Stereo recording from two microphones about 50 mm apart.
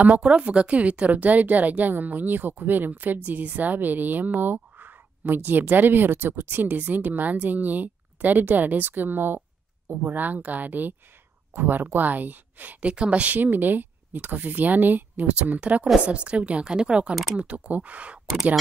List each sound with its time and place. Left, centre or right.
0.2 s a woman's voice: right
12.9 s a woman's voice: right
17.4 s speech: right